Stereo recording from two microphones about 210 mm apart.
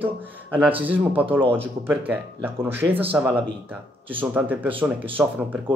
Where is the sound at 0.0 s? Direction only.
10° right (ahead or behind).